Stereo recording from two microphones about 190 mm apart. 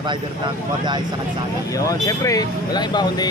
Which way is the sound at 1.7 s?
15° left (ahead or behind).